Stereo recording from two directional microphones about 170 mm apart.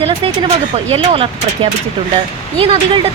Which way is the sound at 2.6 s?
30° right (ahead or behind).